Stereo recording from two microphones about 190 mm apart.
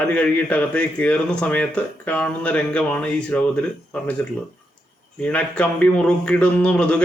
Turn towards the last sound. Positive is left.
turn(degrees=5)  # may be behind; listen again after turning